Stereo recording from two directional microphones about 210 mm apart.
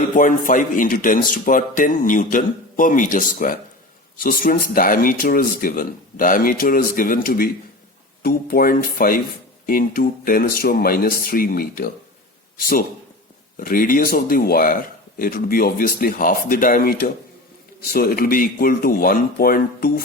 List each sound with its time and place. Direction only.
0.2 s a man's voice: 40° left (ahead or behind)